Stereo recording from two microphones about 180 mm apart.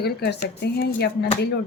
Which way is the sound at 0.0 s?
65° left (ahead or behind).